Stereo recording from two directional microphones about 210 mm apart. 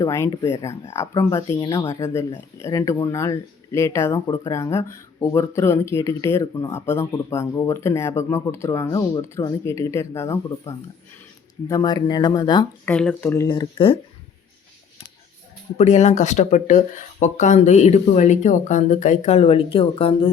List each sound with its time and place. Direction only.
0.0 s speech: 15° left (ahead or behind)
12.8 s speech: 5° left (ahead or behind); by 14.0 s 25° left (ahead or behind)
15.8 s speech: 30° left (ahead or behind)